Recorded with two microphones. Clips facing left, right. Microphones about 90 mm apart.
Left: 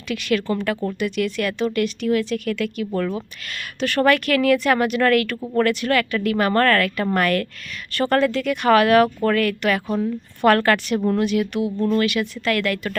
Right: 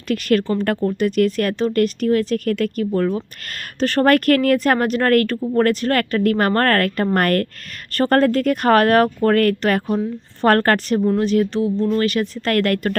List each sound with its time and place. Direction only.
0.1 s speech: 45° right (ahead or behind)
11.6 s speech: 15° left (ahead or behind)
11.9 s speech: 40° right (ahead or behind)